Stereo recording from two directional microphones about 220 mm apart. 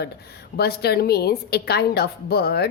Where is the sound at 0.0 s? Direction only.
45° left (ahead or behind).